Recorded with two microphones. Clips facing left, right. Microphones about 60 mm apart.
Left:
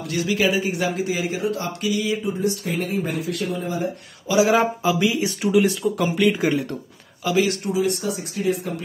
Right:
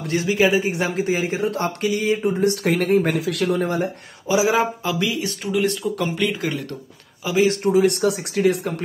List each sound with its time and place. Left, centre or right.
0.0 s a man's voice: right
2.4 s speech: right
4.5 s speech: centre
4.9 s speech: centre
7.2 s speech: centre
7.6 s speech: right